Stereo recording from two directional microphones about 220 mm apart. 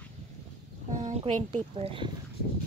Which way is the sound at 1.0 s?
30° right (ahead or behind).